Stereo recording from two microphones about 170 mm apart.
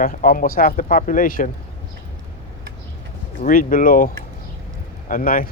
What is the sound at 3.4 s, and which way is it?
Speech, 50° left (ahead or behind).